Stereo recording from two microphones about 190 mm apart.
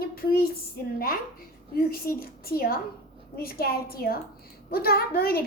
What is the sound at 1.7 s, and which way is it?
A woman's voice, 50° left (ahead or behind).